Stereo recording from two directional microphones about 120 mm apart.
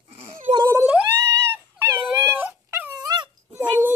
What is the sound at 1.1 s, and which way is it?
Dog, 20° right (ahead or behind).